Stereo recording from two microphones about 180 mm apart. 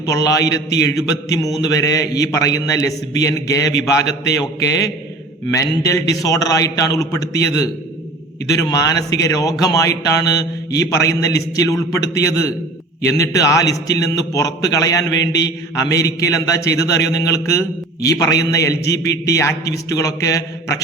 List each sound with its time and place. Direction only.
0.0 s a man's voice: 20° left (ahead or behind)
5.5 s a man's voice: 15° left (ahead or behind)
13.0 s mantra: 15° left (ahead or behind)
13.9 s a man's voice: 20° left (ahead or behind)
19.9 s mantra: 15° left (ahead or behind)